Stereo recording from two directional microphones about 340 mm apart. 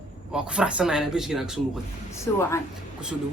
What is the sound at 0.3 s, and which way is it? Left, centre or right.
A man's voice, centre.